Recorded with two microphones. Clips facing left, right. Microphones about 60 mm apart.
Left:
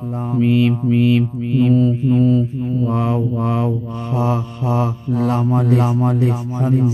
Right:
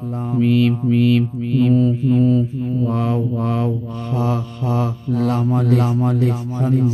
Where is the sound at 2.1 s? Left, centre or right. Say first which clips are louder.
Left 1 dB; centre.